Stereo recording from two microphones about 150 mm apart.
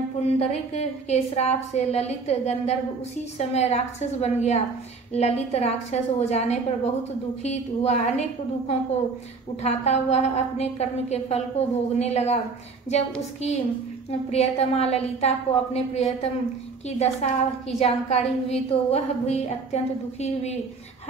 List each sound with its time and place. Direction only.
0.4 s a woman's voice: 45° left (ahead or behind)
13.4 s a woman's voice: 45° left (ahead or behind)